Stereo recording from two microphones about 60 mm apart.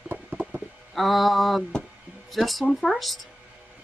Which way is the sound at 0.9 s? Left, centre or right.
Centre.